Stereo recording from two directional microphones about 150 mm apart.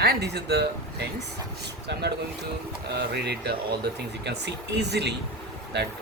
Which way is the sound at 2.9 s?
90° right.